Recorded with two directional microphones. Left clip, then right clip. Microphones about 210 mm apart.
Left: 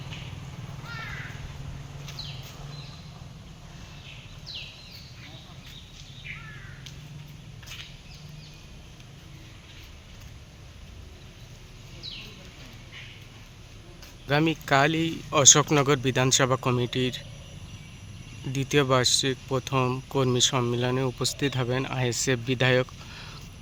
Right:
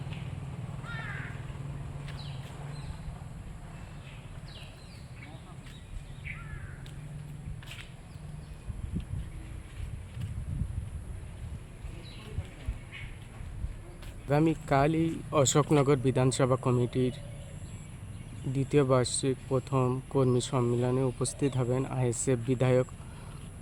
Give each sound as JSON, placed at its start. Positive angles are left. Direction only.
{"t": 14.3, "sound": "speech", "side_deg": 0}
{"t": 18.5, "sound": "speech", "side_deg": 0}